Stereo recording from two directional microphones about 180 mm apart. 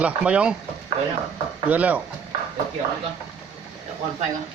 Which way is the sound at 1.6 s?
10° right (ahead or behind).